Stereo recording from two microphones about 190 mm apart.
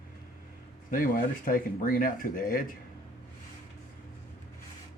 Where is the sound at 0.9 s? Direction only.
45° left (ahead or behind).